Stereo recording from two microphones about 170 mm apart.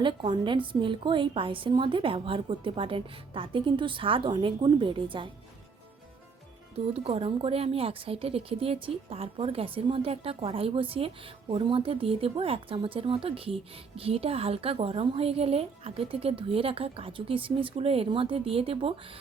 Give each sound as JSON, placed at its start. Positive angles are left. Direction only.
{"t": 0.0, "sound": "a woman's voice", "side_deg": -30}
{"t": 6.9, "sound": "a woman's voice", "side_deg": -35}